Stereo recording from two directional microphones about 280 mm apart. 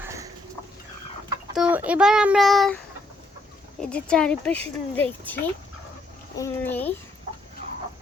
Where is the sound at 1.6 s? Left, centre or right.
Centre.